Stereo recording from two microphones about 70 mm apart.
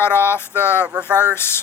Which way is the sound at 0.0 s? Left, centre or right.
Left.